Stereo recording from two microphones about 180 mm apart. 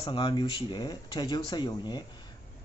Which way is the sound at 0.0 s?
25° left (ahead or behind).